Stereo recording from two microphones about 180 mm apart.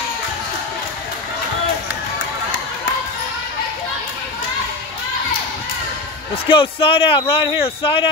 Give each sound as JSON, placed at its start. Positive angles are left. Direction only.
{"t": 6.3, "sound": "a man's voice", "side_deg": 30}